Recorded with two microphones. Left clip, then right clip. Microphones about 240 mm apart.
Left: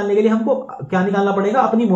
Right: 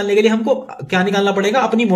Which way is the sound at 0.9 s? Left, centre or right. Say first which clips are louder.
Right 2 dB; right.